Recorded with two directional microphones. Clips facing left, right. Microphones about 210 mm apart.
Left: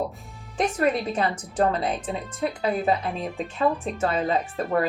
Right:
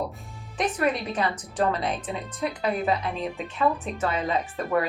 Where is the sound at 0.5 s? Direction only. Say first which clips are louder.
Left 2 dB; 25° left (ahead or behind).